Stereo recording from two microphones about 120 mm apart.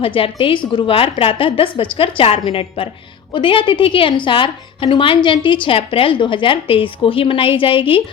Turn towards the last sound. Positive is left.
turn(degrees=50)  # may be behind; listen again after turning